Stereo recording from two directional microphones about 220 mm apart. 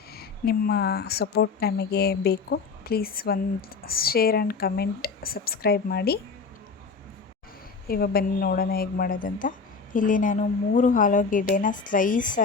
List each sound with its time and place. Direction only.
0.1 s speech: 45° left (ahead or behind)
7.9 s a woman's voice: 45° left (ahead or behind)